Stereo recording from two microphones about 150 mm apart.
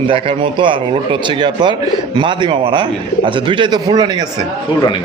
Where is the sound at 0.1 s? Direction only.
35° right (ahead or behind).